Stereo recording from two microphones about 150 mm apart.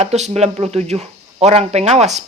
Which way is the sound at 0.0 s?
45° right (ahead or behind).